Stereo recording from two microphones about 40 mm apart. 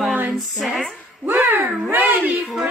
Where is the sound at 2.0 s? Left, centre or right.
Centre.